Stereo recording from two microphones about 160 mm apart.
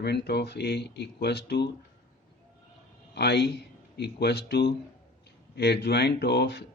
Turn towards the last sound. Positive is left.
turn(degrees=90)